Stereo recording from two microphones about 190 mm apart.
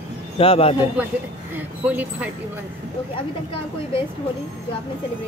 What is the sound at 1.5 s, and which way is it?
Speech, 10° right (ahead or behind).